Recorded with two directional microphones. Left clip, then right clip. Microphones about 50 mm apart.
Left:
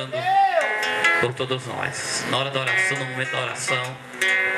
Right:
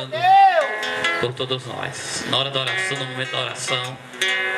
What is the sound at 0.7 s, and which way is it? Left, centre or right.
Music, centre.